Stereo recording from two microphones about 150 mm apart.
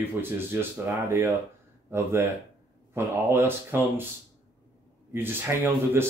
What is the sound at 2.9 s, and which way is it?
Speech, 15° right (ahead or behind).